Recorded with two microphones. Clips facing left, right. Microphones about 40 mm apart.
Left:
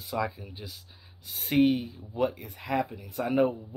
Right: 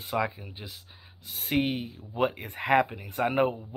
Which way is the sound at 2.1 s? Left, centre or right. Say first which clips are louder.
Right 1 dB; right.